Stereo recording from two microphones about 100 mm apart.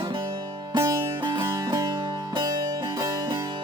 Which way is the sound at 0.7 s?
30° right (ahead or behind).